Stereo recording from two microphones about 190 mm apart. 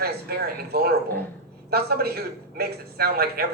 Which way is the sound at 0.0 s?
55° right (ahead or behind).